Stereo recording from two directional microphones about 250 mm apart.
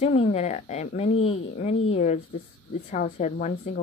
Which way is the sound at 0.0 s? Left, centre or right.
Left.